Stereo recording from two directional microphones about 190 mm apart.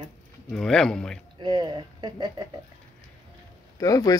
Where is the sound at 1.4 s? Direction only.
25° right (ahead or behind).